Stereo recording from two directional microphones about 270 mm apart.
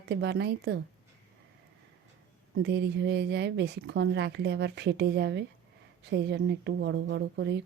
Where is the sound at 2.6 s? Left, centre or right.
Right.